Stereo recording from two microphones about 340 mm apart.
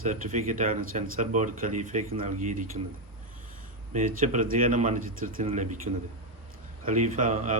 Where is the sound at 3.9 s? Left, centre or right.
Right.